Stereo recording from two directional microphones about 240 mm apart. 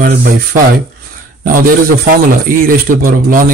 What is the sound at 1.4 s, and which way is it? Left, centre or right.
A man's voice, right.